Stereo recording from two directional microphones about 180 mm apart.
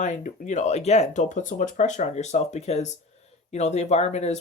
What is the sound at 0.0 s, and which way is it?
Speech, 45° left (ahead or behind).